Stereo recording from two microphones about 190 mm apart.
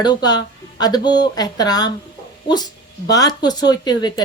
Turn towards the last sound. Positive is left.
turn(degrees=20)  # may be behind; listen again after turning